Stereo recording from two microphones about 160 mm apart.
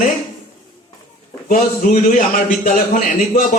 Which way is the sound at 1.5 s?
55° left (ahead or behind).